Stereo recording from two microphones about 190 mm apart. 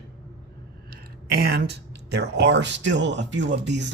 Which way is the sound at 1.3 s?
55° right (ahead or behind).